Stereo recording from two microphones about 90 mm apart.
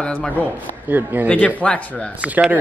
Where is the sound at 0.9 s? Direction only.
20° right (ahead or behind).